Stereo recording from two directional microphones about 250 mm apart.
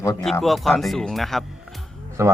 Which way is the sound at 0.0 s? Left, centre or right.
Centre.